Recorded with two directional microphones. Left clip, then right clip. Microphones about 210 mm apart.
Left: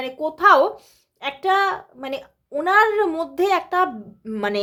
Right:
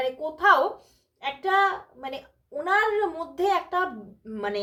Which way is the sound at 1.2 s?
50° left (ahead or behind).